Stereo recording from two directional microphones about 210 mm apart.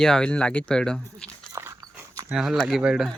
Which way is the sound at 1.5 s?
15° right (ahead or behind).